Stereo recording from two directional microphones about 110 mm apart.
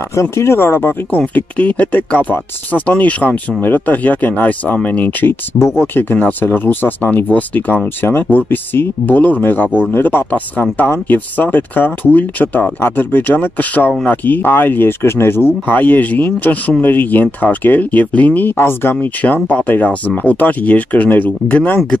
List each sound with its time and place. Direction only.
0.1 s speech: 25° left (ahead or behind)